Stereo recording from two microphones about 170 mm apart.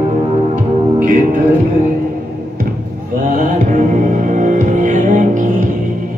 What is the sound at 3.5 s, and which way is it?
Music, 50° right (ahead or behind).